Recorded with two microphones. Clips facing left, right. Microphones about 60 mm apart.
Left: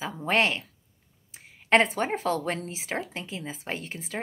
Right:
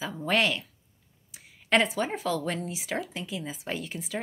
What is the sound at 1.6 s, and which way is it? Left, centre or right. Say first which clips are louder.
Speech: left 3 dB; left.